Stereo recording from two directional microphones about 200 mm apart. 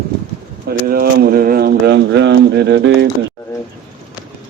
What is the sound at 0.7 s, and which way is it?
Speech, 50° right (ahead or behind).